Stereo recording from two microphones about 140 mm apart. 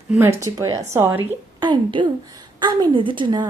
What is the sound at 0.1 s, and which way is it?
Speech, 15° right (ahead or behind).